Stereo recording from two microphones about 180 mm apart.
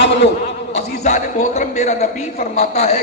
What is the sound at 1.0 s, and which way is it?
A man's voice, 45° left (ahead or behind).